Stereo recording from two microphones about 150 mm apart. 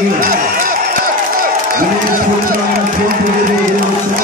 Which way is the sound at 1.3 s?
70° right (ahead or behind).